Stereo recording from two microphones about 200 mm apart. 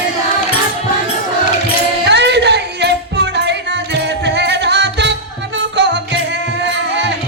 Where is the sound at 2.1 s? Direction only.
60° right (ahead or behind).